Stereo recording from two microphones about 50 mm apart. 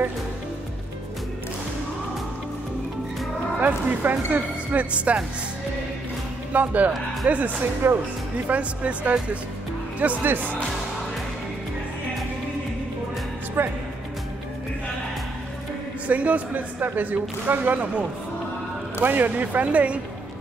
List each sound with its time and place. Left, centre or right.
3.6 s speech: right
6.5 s speech: right
7.8 s speech: right
8.5 s speech: right
13.6 s speech: right
16.1 s speech: right
18.9 s speech: right